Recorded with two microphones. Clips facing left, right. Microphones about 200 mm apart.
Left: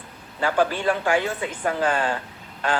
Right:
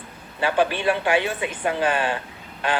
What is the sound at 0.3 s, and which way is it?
A woman's voice, 20° right (ahead or behind).